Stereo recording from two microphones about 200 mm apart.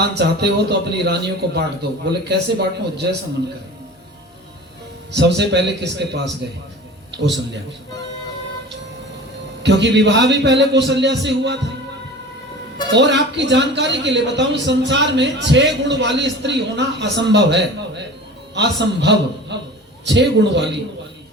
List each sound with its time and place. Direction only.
0.1 s a man's voice: 55° right (ahead or behind)
5.1 s a man's voice: 60° right (ahead or behind)
9.6 s a man's voice: 60° right (ahead or behind)
12.9 s a man's voice: 60° right (ahead or behind)